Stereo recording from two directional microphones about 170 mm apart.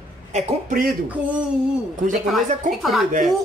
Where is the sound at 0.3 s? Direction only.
50° right (ahead or behind).